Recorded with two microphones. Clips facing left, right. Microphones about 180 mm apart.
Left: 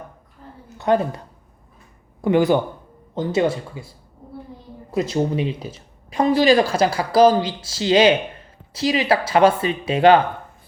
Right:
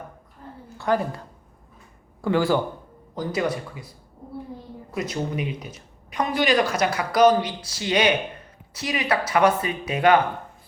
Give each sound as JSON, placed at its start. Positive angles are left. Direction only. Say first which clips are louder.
{"t": 0.8, "sound": "speech", "louder": "left 4 dB", "side_deg": 20}
{"t": 2.2, "sound": "speech", "louder": "left 4 dB", "side_deg": 20}